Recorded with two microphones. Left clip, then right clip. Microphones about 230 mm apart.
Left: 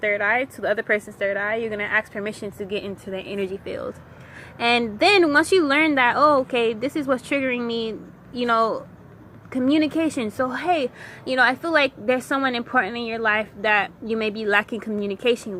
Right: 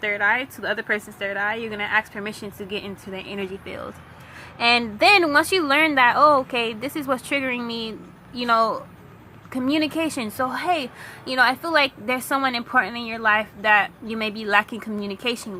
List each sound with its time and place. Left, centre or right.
0.0 s speech: centre